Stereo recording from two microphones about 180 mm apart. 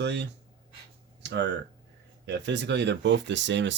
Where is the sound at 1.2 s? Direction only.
70° right (ahead or behind).